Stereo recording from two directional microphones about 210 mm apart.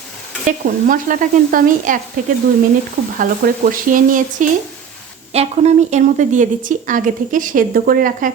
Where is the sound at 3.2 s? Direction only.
40° right (ahead or behind).